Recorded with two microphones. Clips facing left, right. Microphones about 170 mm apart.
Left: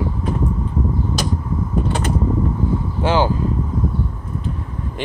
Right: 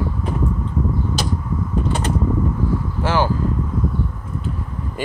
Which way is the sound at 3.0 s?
20° left (ahead or behind).